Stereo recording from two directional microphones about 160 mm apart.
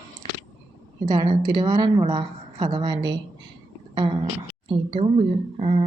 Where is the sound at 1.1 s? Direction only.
25° right (ahead or behind).